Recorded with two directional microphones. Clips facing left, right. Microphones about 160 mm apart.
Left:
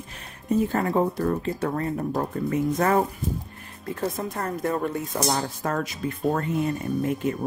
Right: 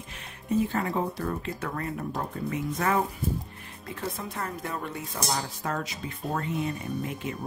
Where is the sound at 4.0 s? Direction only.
45° left (ahead or behind).